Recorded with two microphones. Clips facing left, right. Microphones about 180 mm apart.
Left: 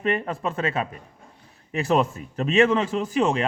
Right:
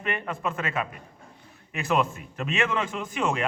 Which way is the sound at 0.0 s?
35° left (ahead or behind).